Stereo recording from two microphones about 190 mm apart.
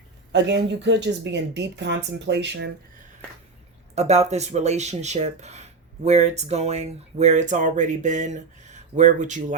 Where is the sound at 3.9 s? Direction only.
35° right (ahead or behind).